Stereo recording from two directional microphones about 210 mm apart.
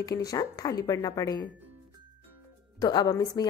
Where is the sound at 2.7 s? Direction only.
20° left (ahead or behind).